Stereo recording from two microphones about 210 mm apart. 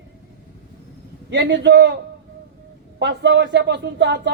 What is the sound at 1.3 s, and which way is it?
Speech, 55° right (ahead or behind).